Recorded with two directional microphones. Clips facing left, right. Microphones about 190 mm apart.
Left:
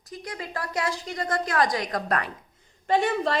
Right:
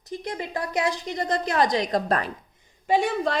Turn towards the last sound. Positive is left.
turn(degrees=-5)  # may be behind; listen again after turning